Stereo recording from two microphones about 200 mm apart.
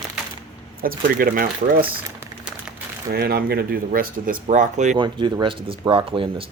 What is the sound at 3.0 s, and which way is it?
Speech, 50° right (ahead or behind).